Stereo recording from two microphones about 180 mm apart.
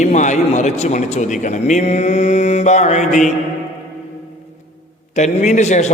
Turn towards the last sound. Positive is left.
turn(degrees=40)  # may be behind; listen again after turning